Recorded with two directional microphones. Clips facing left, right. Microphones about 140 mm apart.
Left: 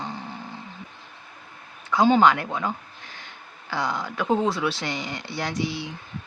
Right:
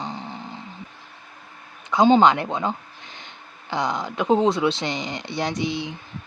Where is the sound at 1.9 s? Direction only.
20° right (ahead or behind).